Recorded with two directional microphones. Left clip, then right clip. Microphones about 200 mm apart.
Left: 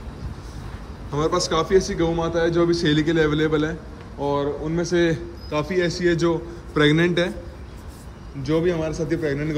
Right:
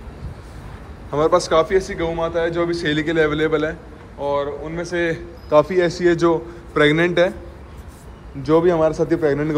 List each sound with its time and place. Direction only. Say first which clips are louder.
1.1 s a man's voice: right 6 dB; 10° left (ahead or behind)
4.2 s speech: right 2 dB; 25° left (ahead or behind)
5.5 s a man's voice: right 8 dB; 5° left (ahead or behind)
8.4 s a man's voice: right 7 dB; centre (ahead or behind)